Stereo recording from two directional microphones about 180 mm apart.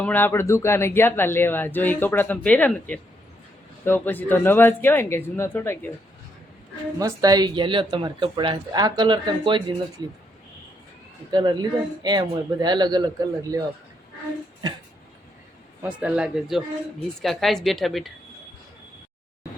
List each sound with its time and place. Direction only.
0.0 s speech: 10° left (ahead or behind)
7.0 s speech: 20° right (ahead or behind)
11.3 s speech: 25° right (ahead or behind)
15.8 s a woman's voice: 5° right (ahead or behind)